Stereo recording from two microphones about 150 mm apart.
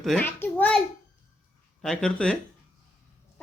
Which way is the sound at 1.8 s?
5° left (ahead or behind).